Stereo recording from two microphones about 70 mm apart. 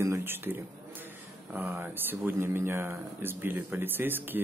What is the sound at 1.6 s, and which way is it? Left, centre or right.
Speech, right.